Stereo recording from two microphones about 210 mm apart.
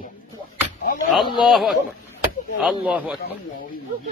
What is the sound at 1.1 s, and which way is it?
A man's voice, centre (ahead or behind).